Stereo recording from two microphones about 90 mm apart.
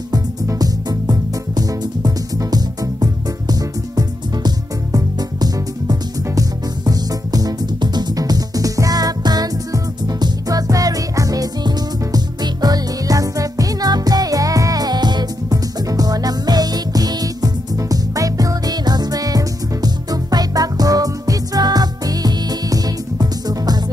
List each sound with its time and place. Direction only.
0.1 s music: 45° right (ahead or behind)